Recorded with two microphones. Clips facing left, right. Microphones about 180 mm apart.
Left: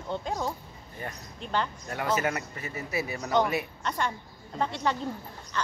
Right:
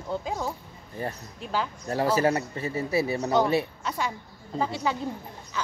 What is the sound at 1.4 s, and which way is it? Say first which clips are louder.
Speech: right 1 dB; 5° right (ahead or behind).